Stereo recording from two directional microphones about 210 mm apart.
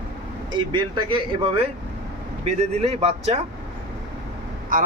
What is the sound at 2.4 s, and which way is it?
Speech, 30° right (ahead or behind).